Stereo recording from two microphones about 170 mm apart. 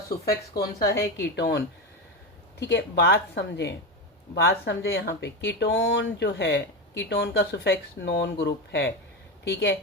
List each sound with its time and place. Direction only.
0.6 s a woman's voice: 20° left (ahead or behind)
1.2 s speech: 80° left
7.0 s speech: 75° left (ahead or behind)